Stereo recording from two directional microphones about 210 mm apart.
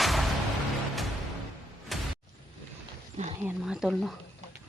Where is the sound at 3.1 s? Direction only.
30° right (ahead or behind).